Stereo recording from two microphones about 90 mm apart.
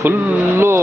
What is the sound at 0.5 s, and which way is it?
Speech, 30° right (ahead or behind).